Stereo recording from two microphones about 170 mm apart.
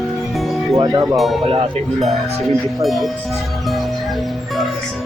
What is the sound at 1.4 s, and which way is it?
Speech, 35° right (ahead or behind).